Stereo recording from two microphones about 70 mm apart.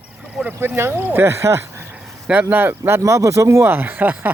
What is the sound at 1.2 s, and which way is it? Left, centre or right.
Speech, right.